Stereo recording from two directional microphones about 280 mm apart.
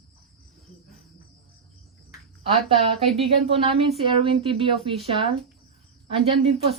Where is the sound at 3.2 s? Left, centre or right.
Right.